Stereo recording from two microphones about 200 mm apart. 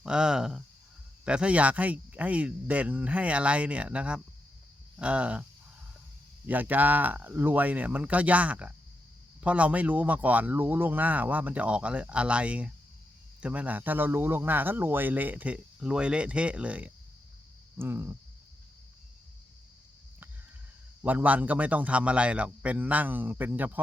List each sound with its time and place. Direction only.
0.0 s speech: 5° right (ahead or behind)
6.5 s speech: 10° right (ahead or behind)
21.0 s speech: 10° right (ahead or behind)